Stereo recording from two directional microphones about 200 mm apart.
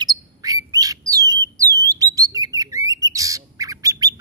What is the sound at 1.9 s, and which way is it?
Squawk, 15° right (ahead or behind).